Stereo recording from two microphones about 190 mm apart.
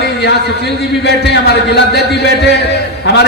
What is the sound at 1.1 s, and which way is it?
Speech, 60° left (ahead or behind).